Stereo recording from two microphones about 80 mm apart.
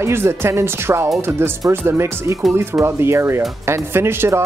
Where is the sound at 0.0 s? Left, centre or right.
Right.